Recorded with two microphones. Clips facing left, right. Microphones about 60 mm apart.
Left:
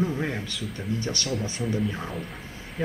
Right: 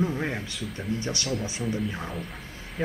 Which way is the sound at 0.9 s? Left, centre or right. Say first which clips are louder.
Left 2 dB; right.